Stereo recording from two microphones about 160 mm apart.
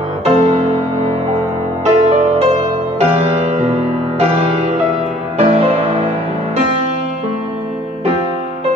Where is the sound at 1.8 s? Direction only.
40° right (ahead or behind).